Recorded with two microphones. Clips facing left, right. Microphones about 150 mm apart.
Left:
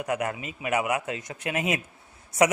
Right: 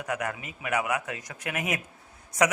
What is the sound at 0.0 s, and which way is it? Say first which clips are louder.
A man's voice: left 3 dB; 25° left (ahead or behind).